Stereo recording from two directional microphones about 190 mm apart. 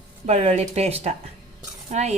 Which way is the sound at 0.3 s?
35° right (ahead or behind).